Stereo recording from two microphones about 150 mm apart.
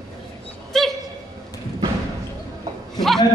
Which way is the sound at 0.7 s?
Centre (ahead or behind).